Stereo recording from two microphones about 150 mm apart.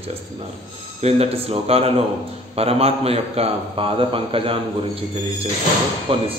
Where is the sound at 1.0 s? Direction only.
45° right (ahead or behind).